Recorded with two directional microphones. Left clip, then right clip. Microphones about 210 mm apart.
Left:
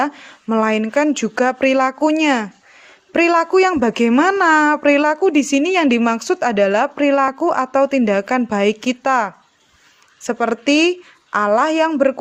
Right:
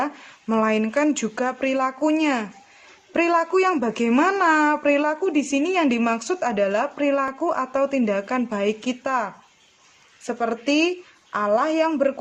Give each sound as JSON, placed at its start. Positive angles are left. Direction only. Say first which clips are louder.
{"t": 0.0, "sound": "a woman's voice", "louder": "left 6 dB", "side_deg": 25}